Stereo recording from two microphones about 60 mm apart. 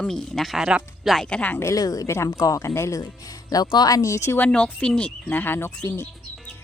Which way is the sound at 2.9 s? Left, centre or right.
Left.